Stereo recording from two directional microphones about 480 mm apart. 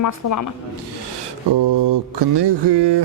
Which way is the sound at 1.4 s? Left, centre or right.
Right.